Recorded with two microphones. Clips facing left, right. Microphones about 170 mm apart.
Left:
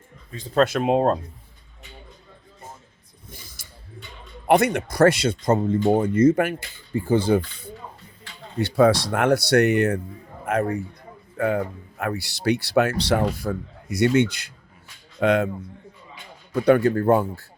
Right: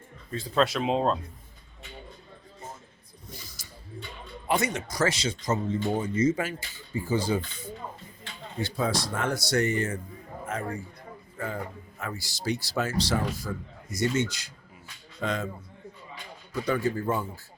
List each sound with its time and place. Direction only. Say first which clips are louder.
0.5 s speech: left 6 dB; 50° left (ahead or behind)
3.2 s a sound: even; 55° left (ahead or behind)
4.4 s a man's voice: left 9 dB; 60° left (ahead or behind)
16.6 s speech: left 10 dB; 60° left (ahead or behind)